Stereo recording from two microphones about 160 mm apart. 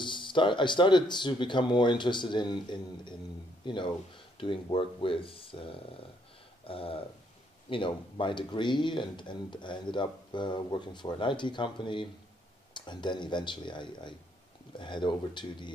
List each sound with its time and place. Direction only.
0.0 s speech: 30° left (ahead or behind)